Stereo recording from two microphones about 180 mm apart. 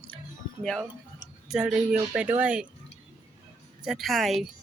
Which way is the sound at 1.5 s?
5° right (ahead or behind).